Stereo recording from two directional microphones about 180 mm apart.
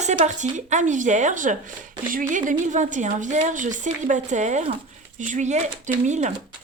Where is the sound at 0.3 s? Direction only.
40° right (ahead or behind).